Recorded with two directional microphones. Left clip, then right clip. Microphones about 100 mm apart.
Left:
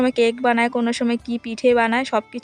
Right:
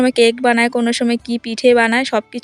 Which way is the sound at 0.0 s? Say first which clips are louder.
Right 5 dB; 50° right (ahead or behind).